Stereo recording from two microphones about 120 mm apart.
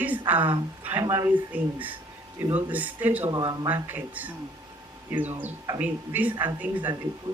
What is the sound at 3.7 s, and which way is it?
Speech, 15° right (ahead or behind).